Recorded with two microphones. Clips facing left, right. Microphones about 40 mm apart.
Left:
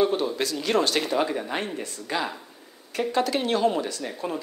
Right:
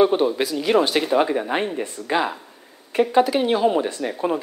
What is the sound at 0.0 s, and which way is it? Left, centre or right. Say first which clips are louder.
A woman's voice: right 6 dB; right.